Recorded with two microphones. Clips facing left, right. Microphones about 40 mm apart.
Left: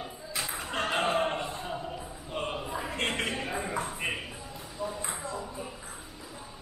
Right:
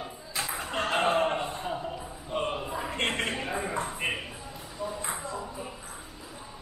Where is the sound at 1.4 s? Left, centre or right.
Centre.